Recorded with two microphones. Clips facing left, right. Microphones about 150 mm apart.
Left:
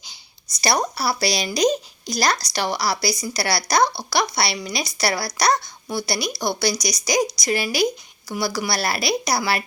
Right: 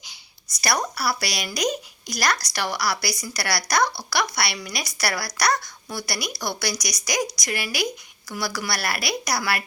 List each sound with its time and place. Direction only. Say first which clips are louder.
0.6 s speech: left 3 dB; 25° left (ahead or behind)